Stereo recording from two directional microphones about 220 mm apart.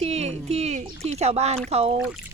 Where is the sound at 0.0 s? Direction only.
30° right (ahead or behind).